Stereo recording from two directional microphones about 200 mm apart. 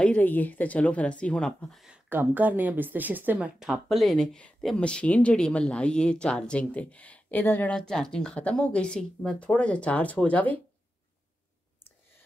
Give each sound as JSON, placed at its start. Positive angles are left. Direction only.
{"t": 0.0, "sound": "speech", "side_deg": 10}